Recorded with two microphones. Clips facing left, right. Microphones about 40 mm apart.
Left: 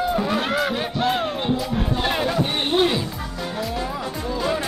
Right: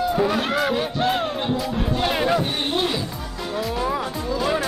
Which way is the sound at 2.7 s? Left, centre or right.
Centre.